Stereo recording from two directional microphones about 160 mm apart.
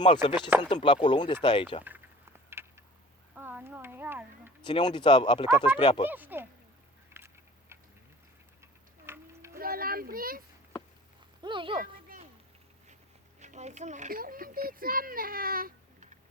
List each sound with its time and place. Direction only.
0.0 s speech: 30° left (ahead or behind)
2.5 s a sound: 15° right (ahead or behind)
3.3 s speech: 10° right (ahead or behind)
4.6 s speech: 30° left (ahead or behind)
6.1 s speech: 10° right (ahead or behind)
7.1 s tick-tock: 15° right (ahead or behind)
8.6 s tick-tock: 15° right (ahead or behind)
9.6 s a sound: 65° right (ahead or behind)
11.4 s speech: 30° right (ahead or behind)
11.8 s a sound: 60° right (ahead or behind)
13.4 s a child's voice: 45° right (ahead or behind); by 15.7 s 65° right (ahead or behind)